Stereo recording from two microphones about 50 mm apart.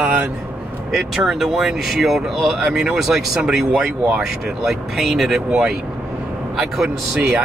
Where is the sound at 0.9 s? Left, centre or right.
Centre.